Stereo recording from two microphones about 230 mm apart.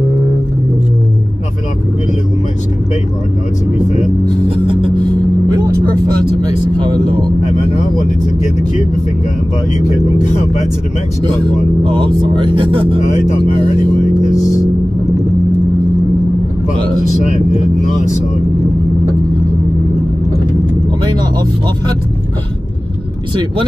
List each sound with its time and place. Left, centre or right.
6.8 s speech: centre
9.8 s speech: left
11.8 s speech: right